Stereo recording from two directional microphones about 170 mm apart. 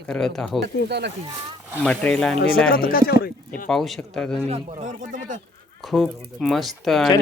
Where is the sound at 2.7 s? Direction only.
60° left (ahead or behind).